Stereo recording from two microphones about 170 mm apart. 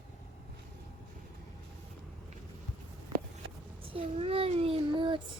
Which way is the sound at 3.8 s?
35° right (ahead or behind).